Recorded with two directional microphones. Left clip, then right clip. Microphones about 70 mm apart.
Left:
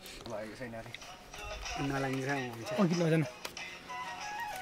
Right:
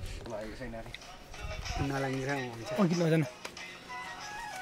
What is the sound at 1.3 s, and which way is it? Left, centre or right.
Music, centre.